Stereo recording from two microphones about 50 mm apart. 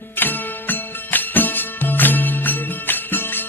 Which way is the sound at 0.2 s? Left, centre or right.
Left.